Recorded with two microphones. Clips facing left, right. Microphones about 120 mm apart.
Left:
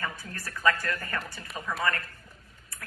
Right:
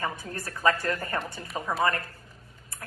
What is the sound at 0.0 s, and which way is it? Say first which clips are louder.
A woman's voice: right 4 dB; 25° right (ahead or behind).